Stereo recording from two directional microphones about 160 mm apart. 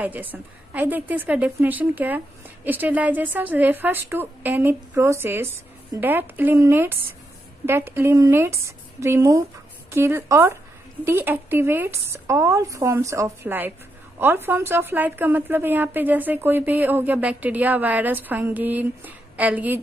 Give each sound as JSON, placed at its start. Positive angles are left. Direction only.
{"t": 0.0, "sound": "a woman's voice", "side_deg": -10}